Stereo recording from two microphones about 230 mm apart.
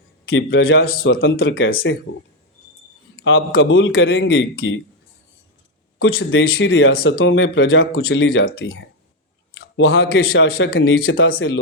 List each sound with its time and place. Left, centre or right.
0.3 s a man's voice: left
1.2 s a man's voice: left
3.2 s speech: left
6.0 s speech: left
9.6 s a sound: left
10.3 s speech: left